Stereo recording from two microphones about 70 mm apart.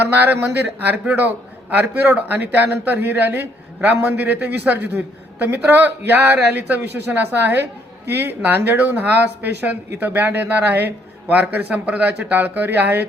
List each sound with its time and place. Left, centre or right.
0.0 s speech: right